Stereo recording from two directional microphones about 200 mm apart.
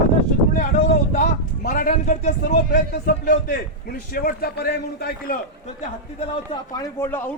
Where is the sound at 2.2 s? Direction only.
40° left (ahead or behind).